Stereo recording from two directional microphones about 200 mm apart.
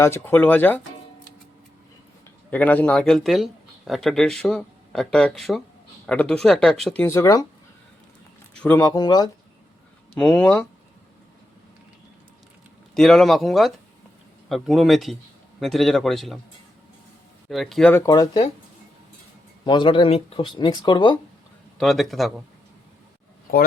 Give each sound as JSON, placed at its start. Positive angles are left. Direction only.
{"t": 0.0, "sound": "speech", "side_deg": 10}
{"t": 2.5, "sound": "speech", "side_deg": 10}
{"t": 8.6, "sound": "speech", "side_deg": 15}
{"t": 10.2, "sound": "speech", "side_deg": 5}
{"t": 12.9, "sound": "speech", "side_deg": 0}
{"t": 17.5, "sound": "speech", "side_deg": 0}
{"t": 17.9, "sound": "speech", "side_deg": 15}
{"t": 19.6, "sound": "speech", "side_deg": 25}
{"t": 21.8, "sound": "speech", "side_deg": 0}